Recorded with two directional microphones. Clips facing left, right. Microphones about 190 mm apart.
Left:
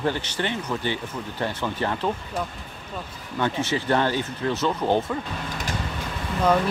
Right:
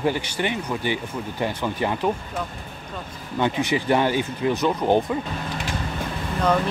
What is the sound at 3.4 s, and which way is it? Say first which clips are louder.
Speech: right 3 dB; 15° right (ahead or behind).